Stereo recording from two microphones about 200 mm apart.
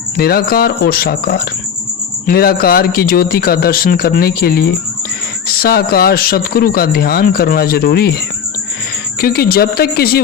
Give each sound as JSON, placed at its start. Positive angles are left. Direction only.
{"t": 0.2, "sound": "a man's voice", "side_deg": 50}
{"t": 9.2, "sound": "a man's voice", "side_deg": 50}